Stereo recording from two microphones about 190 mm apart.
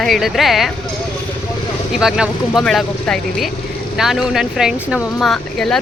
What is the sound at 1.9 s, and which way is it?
Speech, centre (ahead or behind).